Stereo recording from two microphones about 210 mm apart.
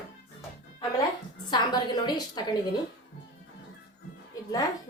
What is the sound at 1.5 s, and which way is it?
A woman's voice, 20° left (ahead or behind).